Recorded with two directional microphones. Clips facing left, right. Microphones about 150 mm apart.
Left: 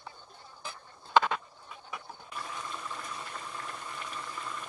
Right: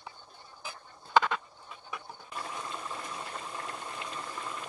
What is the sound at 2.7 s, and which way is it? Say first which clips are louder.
Boiling: right 1 dB; 15° right (ahead or behind).